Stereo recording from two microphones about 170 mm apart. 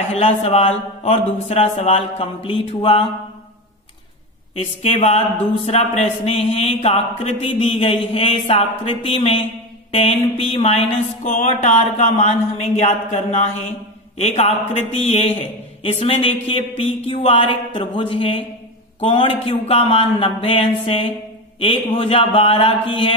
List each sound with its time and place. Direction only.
0.1 s a man's voice: 35° left (ahead or behind)
4.6 s a man's voice: 35° left (ahead or behind)
11.2 s a man's voice: 50° left (ahead or behind); by 23.1 s 35° left (ahead or behind)